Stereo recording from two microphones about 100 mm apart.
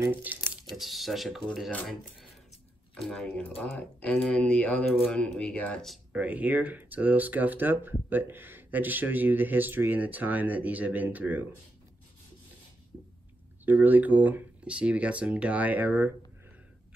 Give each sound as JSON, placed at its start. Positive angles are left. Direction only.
{"t": 0.0, "sound": "speech", "side_deg": -20}
{"t": 0.7, "sound": "speech", "side_deg": 0}
{"t": 3.0, "sound": "speech", "side_deg": 5}
{"t": 3.4, "sound": "speech", "side_deg": 15}
{"t": 6.1, "sound": "speech", "side_deg": -15}
{"t": 13.7, "sound": "speech", "side_deg": -15}